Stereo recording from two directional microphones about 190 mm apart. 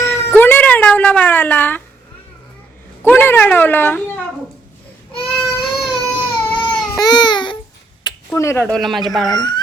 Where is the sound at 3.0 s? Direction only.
10° left (ahead or behind).